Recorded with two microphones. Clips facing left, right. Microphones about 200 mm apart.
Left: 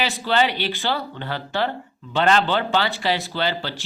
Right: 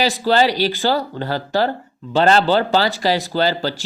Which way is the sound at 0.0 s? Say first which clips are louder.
Right 5 dB; 40° right (ahead or behind).